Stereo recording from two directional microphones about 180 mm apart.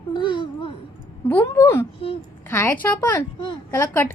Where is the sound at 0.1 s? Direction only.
25° left (ahead or behind).